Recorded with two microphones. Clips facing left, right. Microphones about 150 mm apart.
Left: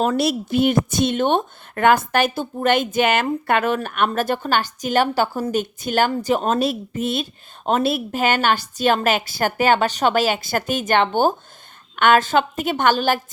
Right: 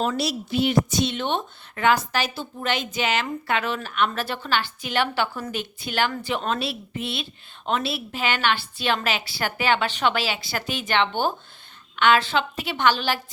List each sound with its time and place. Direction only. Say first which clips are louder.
0.0 s a woman's voice: left 6 dB; 55° left (ahead or behind)